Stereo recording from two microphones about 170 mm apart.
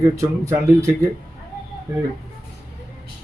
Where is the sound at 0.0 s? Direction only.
15° right (ahead or behind).